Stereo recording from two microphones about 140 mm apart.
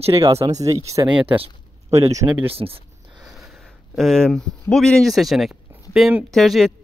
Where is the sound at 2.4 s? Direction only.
40° right (ahead or behind).